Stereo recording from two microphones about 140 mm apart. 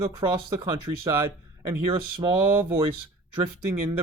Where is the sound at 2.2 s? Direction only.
20° right (ahead or behind).